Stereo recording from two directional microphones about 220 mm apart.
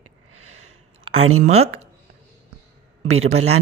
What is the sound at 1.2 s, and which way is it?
Speech, 70° right (ahead or behind).